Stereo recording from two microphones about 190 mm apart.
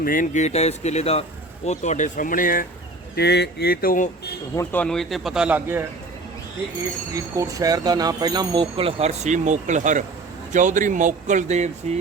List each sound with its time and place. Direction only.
0.0 s speech: 45° left (ahead or behind)
3.2 s speech: 60° left (ahead or behind); by 4.4 s 45° left (ahead or behind)
4.5 s speech: 10° left (ahead or behind); by 5.8 s 10° right (ahead or behind)
7.3 s speech: 20° right (ahead or behind); by 11.9 s 35° right (ahead or behind)